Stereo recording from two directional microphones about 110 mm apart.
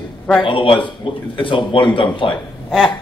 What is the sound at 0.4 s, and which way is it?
A man's voice, 50° left (ahead or behind).